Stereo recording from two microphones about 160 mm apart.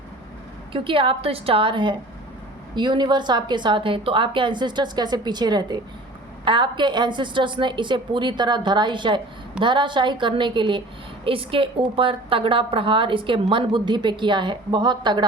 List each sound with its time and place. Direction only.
0.7 s a woman's voice: 35° right (ahead or behind)